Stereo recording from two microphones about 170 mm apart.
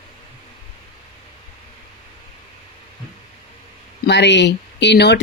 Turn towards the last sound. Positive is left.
turn(degrees=85)